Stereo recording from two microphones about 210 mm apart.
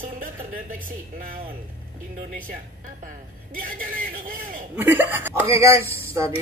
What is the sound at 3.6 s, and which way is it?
A man's voice, 40° right (ahead or behind).